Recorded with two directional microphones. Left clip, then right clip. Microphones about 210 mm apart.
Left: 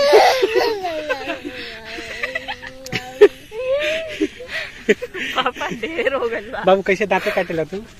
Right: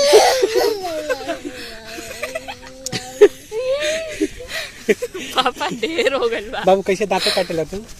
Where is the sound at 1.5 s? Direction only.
50° right (ahead or behind).